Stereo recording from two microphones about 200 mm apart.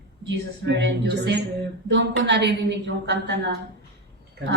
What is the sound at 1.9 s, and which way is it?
A woman's voice, 60° right (ahead or behind).